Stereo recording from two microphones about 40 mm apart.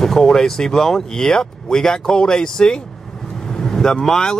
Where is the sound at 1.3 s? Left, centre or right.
Centre.